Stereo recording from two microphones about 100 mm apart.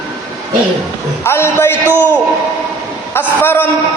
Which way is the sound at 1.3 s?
25° left (ahead or behind).